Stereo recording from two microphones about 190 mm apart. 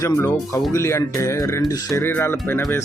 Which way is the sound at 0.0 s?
15° left (ahead or behind).